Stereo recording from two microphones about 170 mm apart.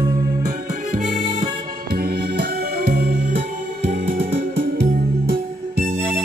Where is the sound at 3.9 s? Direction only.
35° right (ahead or behind).